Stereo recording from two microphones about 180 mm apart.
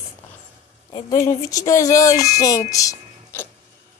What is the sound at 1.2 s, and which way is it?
A woman's voice, 20° left (ahead or behind).